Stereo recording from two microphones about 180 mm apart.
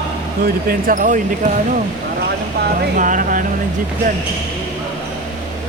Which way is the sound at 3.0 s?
45° right (ahead or behind).